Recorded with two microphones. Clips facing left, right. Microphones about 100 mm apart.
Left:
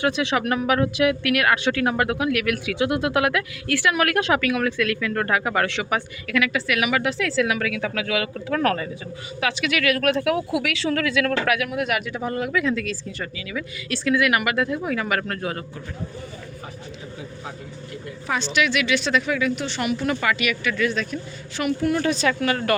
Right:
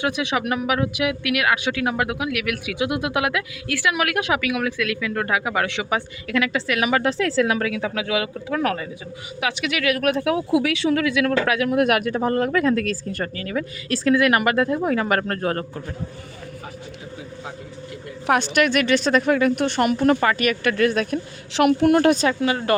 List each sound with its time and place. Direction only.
0.0 s speech: 15° right (ahead or behind)
8.3 s speech: 10° right (ahead or behind)
9.4 s speech: 20° right (ahead or behind)
11.7 s speech: 50° right (ahead or behind)
18.3 s a woman's voice: 55° right (ahead or behind)
20.7 s a woman's voice: 50° right (ahead or behind)
21.5 s a woman's voice: 70° right (ahead or behind)
22.3 s speech: 20° right (ahead or behind)